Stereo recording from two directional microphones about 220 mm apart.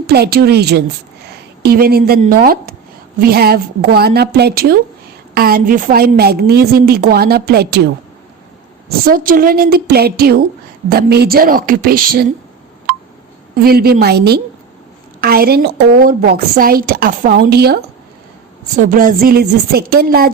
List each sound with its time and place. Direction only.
0.1 s a woman's voice: 45° right (ahead or behind)
9.0 s a woman's voice: 40° right (ahead or behind)
13.6 s a woman's voice: 45° right (ahead or behind)
18.8 s a woman's voice: 40° right (ahead or behind)